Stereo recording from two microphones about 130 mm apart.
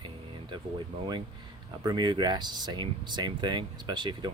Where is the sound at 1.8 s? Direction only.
35° right (ahead or behind).